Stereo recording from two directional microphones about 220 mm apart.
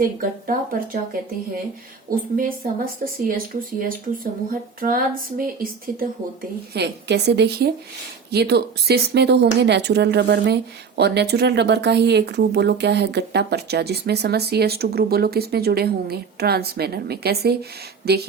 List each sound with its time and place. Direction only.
0.2 s speech: 40° right (ahead or behind)
2.0 s speech: 40° right (ahead or behind)